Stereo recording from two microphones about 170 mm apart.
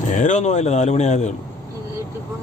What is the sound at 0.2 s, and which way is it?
Speech, 45° left (ahead or behind).